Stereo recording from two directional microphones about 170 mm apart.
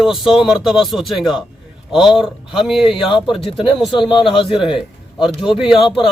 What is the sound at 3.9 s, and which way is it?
Speech, 30° left (ahead or behind).